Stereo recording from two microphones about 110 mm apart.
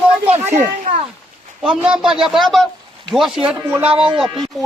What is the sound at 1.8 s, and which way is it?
Speech, 5° right (ahead or behind).